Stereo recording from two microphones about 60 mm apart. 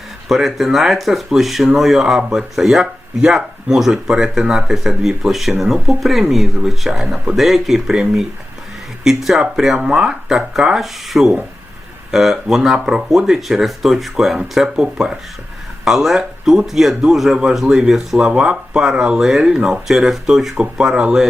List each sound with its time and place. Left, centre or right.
0.3 s speech: centre